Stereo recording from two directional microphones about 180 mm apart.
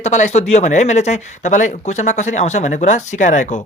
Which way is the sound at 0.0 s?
40° left (ahead or behind).